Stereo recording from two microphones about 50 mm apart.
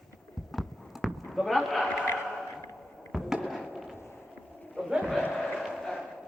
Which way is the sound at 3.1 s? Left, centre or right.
Centre.